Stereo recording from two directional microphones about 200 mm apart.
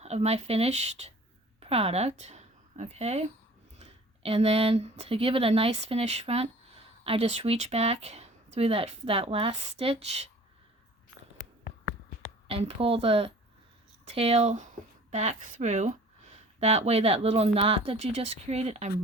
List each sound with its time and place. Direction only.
0.0 s a woman's voice: 30° right (ahead or behind)
12.5 s speech: 30° right (ahead or behind)